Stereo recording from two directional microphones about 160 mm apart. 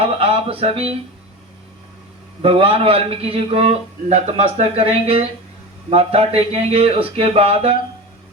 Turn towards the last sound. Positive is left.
turn(degrees=-35)  # may be behind; listen again after turning